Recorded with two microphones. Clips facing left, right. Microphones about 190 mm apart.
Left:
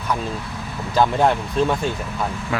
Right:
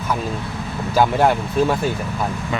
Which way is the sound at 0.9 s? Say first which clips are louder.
Right 1 dB; 5° right (ahead or behind).